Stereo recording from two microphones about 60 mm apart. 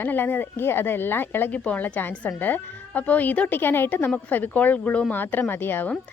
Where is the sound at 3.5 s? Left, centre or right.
Left; by 5.1 s centre.